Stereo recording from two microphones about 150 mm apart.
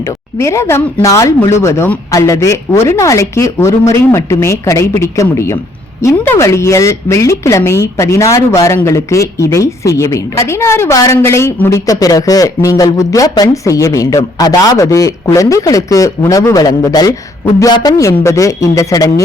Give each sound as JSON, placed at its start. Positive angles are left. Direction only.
{"t": 0.3, "sound": "a woman's voice", "side_deg": 20}